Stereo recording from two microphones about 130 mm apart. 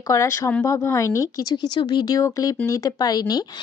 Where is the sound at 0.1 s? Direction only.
20° left (ahead or behind).